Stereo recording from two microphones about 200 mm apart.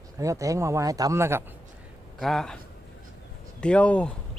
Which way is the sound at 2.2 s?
Centre (ahead or behind).